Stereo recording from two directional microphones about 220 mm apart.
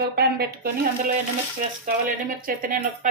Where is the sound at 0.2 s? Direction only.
45° right (ahead or behind).